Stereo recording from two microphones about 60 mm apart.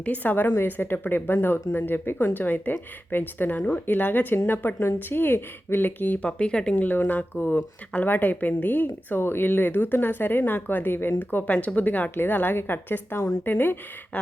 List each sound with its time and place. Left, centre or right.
0.0 s speech: left
6.7 s speech: left